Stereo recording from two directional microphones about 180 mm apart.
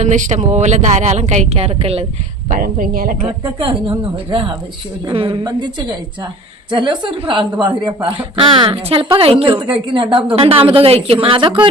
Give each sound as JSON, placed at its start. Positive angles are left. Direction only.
{"t": 0.0, "sound": "a woman's voice", "side_deg": -40}
{"t": 2.5, "sound": "speech", "side_deg": -50}
{"t": 3.4, "sound": "a woman's voice", "side_deg": -30}
{"t": 6.7, "sound": "a woman's voice", "side_deg": -25}